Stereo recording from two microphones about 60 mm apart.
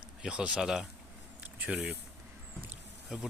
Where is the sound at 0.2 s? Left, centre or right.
Centre.